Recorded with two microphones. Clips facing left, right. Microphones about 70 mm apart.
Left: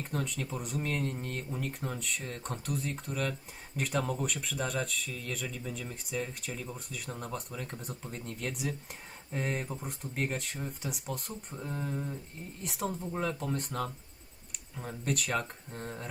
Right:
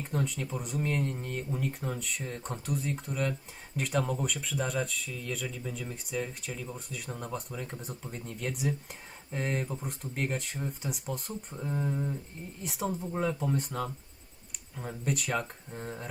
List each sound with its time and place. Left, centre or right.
0.0 s speech: centre